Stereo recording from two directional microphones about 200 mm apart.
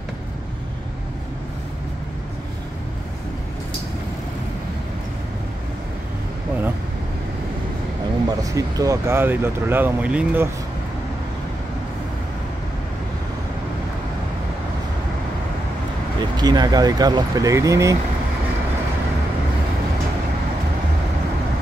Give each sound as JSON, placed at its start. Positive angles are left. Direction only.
{"t": 8.3, "sound": "speech", "side_deg": -20}
{"t": 16.2, "sound": "speech", "side_deg": -20}